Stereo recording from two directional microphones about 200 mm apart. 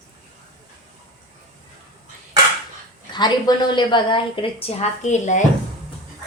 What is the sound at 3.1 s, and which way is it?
A woman's voice, 20° left (ahead or behind).